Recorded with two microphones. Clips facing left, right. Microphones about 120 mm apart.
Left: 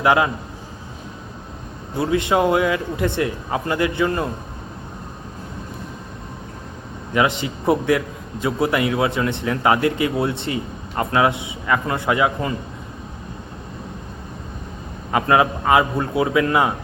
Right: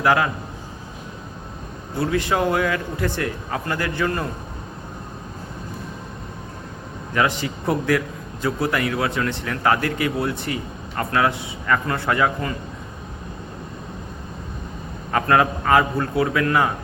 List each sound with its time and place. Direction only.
0.0 s a man's voice: 20° left (ahead or behind)
2.0 s a man's voice: 20° left (ahead or behind)
7.1 s a man's voice: 20° left (ahead or behind)
15.1 s a man's voice: 15° left (ahead or behind)